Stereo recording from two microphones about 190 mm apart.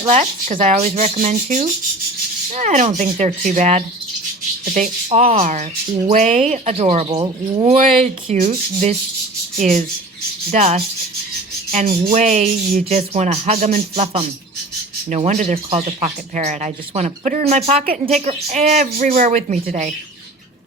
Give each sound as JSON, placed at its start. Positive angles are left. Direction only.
{"t": 0.1, "sound": "speech", "side_deg": -40}
{"t": 7.2, "sound": "speech", "side_deg": -20}
{"t": 7.7, "sound": "speech", "side_deg": -35}
{"t": 18.8, "sound": "speech", "side_deg": -45}